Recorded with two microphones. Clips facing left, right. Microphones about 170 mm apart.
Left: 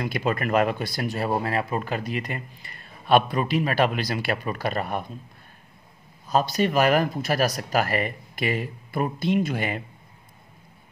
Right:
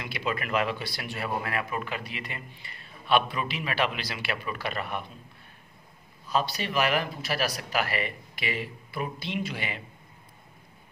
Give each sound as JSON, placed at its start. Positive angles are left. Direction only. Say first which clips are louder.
{"t": 0.0, "sound": "speech", "louder": "left 6 dB", "side_deg": 45}
{"t": 6.2, "sound": "speech", "louder": "left 6 dB", "side_deg": 45}